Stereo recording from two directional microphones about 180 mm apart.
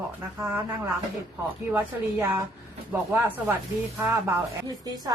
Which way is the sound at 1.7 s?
15° right (ahead or behind).